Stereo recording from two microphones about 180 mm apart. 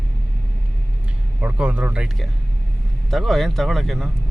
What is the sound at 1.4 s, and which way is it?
Speech, 5° right (ahead or behind).